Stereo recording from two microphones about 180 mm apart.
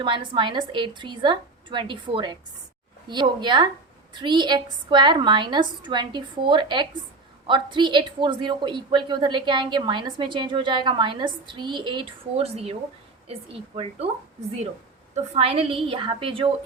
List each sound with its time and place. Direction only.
0.0 s a woman's voice: 25° right (ahead or behind)
15.1 s a woman's voice: 30° right (ahead or behind)